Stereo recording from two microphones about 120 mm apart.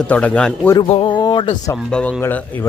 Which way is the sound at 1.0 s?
40° left (ahead or behind).